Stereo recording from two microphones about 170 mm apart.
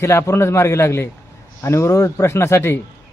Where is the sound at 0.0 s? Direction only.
15° left (ahead or behind).